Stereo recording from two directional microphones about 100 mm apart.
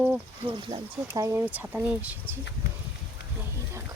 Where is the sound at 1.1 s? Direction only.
30° right (ahead or behind).